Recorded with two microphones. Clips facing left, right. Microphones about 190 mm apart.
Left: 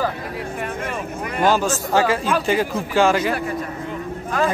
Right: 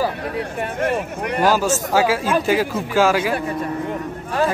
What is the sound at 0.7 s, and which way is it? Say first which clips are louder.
Speech: right 5 dB; 70° right (ahead or behind).